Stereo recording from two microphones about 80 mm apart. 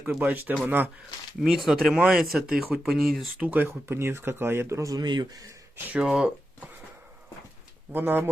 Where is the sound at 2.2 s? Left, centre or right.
Centre.